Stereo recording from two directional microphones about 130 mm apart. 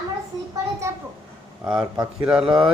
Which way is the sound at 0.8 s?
20° right (ahead or behind).